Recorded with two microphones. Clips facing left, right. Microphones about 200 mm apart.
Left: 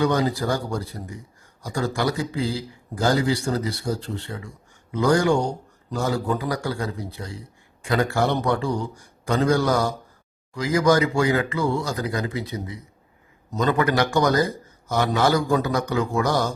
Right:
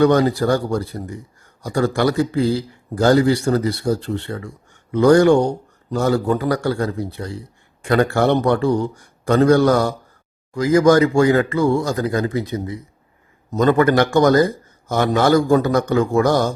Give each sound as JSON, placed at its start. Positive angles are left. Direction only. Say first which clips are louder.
{"t": 0.0, "sound": "a man's voice", "louder": "right 7 dB", "side_deg": -60}
{"t": 10.5, "sound": "a man's voice", "louder": "right 6 dB", "side_deg": -50}